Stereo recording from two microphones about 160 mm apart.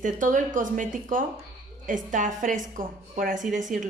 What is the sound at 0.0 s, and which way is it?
A woman's voice, 55° right (ahead or behind).